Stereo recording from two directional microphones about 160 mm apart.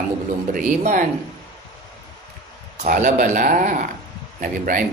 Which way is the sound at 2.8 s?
50° right (ahead or behind).